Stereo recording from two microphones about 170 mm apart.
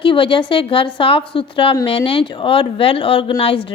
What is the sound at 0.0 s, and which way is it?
A woman's voice, 30° left (ahead or behind).